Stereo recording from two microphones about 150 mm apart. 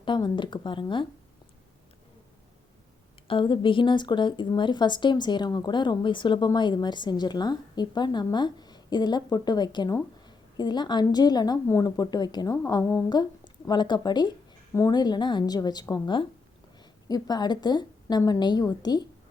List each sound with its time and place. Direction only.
0.0 s speech: 30° left (ahead or behind)
3.2 s a woman's voice: 35° left (ahead or behind)
17.1 s a woman's voice: 25° left (ahead or behind)